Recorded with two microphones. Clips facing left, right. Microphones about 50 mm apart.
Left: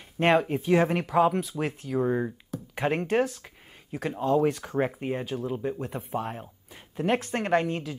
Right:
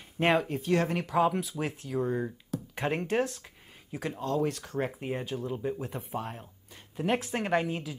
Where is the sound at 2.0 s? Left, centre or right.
Left.